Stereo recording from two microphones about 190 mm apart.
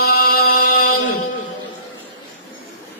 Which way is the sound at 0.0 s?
55° left (ahead or behind).